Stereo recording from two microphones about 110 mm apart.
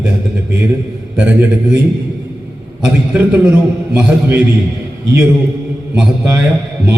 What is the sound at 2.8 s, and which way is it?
A man's voice, 10° right (ahead or behind).